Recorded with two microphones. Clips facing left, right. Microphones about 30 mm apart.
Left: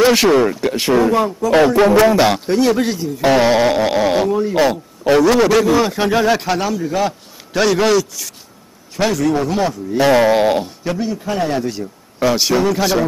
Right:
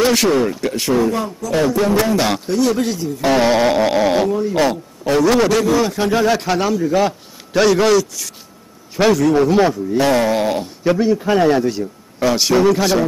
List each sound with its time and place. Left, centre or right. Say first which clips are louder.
0.0 s speech: left 3 dB; centre; by 2.0 s left
2.1 s speech: left 4 dB; centre
2.4 s a man's voice: left 2 dB; left; by 4.3 s centre
4.3 s a man's voice: left 2 dB; centre
9.9 s speech: left 5 dB; centre
10.8 s a man's voice: right 6 dB; centre
11.5 s a man's voice: right 3 dB; centre